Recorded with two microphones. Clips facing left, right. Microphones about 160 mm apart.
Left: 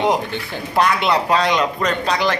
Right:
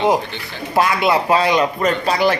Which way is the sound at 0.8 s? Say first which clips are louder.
Right 1 dB; 5° right (ahead or behind).